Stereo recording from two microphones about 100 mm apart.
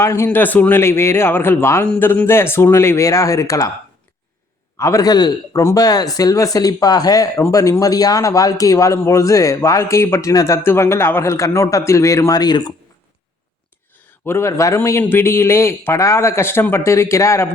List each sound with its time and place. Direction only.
0.0 s a man's voice: 30° left (ahead or behind)
0.3 s a man's voice: 15° left (ahead or behind); by 3.7 s 35° left (ahead or behind)
4.8 s speech: 35° left (ahead or behind)
14.3 s a man's voice: 25° left (ahead or behind)